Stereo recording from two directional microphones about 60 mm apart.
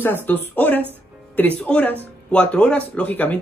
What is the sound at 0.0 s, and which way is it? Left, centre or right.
Speech, left.